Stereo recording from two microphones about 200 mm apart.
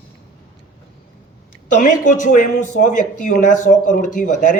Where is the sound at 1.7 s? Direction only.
40° left (ahead or behind).